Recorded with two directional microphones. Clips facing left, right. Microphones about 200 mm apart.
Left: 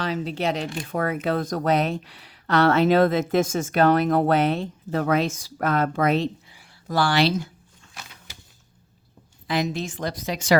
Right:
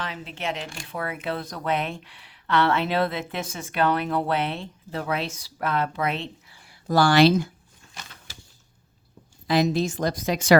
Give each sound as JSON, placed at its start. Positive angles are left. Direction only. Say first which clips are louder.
{"t": 0.0, "sound": "speech", "louder": "left 7 dB", "side_deg": 35}
{"t": 6.8, "sound": "a woman's voice", "louder": "right 4 dB", "side_deg": -45}
{"t": 9.5, "sound": "a woman's voice", "louder": "right 4 dB", "side_deg": -35}